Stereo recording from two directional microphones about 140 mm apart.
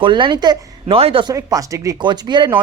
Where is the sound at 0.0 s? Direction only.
35° right (ahead or behind).